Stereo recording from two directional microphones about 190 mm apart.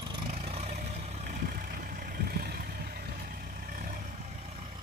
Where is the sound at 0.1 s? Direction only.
30° right (ahead or behind).